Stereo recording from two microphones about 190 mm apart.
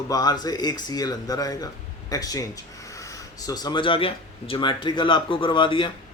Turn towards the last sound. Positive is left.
turn(degrees=25)  # may be behind; listen again after turning